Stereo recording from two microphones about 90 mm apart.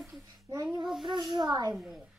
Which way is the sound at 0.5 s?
40° right (ahead or behind).